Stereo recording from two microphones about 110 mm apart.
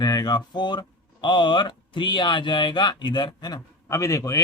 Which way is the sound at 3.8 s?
30° left (ahead or behind).